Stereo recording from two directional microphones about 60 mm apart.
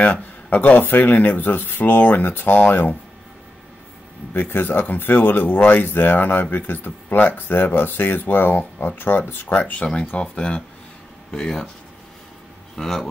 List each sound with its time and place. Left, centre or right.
0.0 s speech: left
4.3 s speech: left
9.8 s speech: centre
12.7 s speech: centre